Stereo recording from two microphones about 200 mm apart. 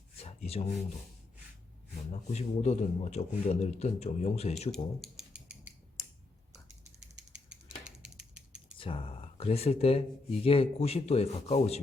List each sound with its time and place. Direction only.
0.2 s rub: 30° left (ahead or behind)
2.3 s a man's voice: 35° left (ahead or behind)
4.7 s a sound: centre (ahead or behind)
6.0 s finger snapping: 15° left (ahead or behind)
8.0 s a sound: 5° right (ahead or behind)
8.8 s a man's voice: 25° left (ahead or behind)